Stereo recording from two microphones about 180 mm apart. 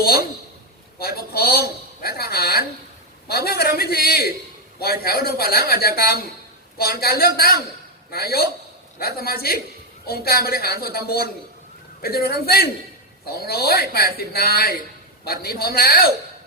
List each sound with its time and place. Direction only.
0.0 s speech: 55° left (ahead or behind)